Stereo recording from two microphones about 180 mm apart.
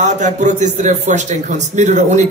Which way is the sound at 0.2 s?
45° right (ahead or behind).